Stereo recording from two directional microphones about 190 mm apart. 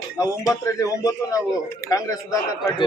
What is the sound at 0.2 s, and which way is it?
A man's voice, 15° left (ahead or behind).